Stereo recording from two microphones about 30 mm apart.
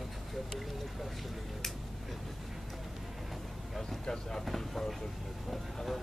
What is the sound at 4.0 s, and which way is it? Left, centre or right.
Speech, centre.